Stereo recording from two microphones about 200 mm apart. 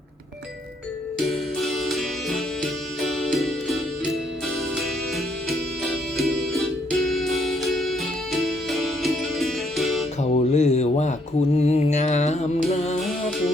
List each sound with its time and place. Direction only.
1.3 s music: centre (ahead or behind)
10.2 s mantra: 35° left (ahead or behind)